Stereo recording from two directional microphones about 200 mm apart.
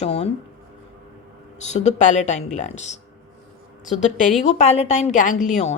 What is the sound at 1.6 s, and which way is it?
Speech, 35° left (ahead or behind).